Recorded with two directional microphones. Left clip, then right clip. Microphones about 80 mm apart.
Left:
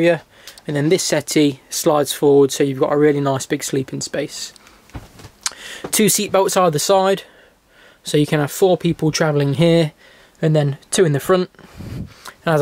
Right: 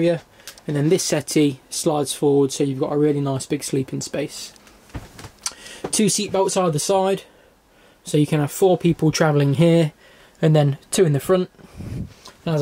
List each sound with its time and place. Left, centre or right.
0.7 s speech: centre
5.4 s a sound: left
6.4 s speech: left